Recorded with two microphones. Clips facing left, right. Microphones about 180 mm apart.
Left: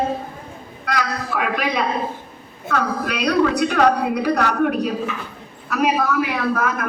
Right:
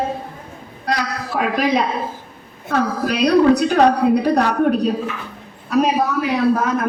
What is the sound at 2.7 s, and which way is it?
A woman's voice, 35° right (ahead or behind).